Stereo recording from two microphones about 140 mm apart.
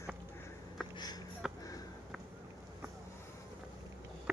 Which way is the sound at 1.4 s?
5° right (ahead or behind).